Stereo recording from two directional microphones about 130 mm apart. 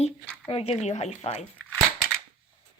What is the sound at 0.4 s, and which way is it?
Speech, 45° left (ahead or behind).